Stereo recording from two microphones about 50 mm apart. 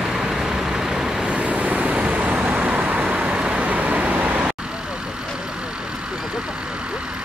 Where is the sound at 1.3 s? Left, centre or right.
Right.